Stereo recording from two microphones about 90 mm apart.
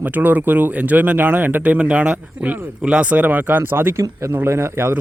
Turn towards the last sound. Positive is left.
turn(degrees=-25)  # may be behind; listen again after turning